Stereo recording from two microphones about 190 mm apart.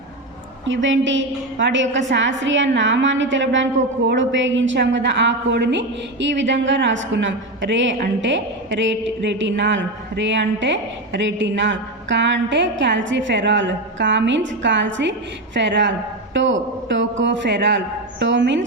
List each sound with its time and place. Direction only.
0.6 s a woman's voice: 80° right